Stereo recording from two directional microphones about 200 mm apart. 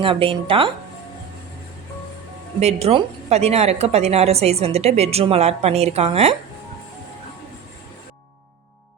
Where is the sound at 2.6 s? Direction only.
30° right (ahead or behind).